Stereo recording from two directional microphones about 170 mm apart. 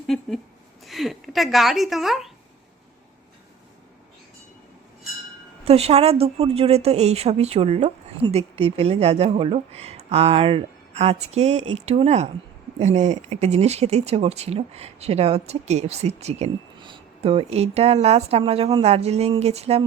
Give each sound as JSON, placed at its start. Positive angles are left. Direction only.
{"t": 0.1, "sound": "a woman's voice", "side_deg": 0}
{"t": 5.6, "sound": "speech", "side_deg": -35}
{"t": 16.7, "sound": "speech", "side_deg": -30}